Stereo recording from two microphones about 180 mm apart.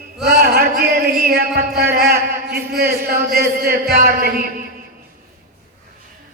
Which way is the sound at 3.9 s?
55° right (ahead or behind).